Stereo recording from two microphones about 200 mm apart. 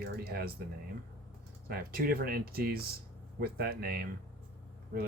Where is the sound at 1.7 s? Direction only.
50° right (ahead or behind).